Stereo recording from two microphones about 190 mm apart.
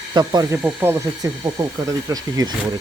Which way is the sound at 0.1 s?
20° right (ahead or behind).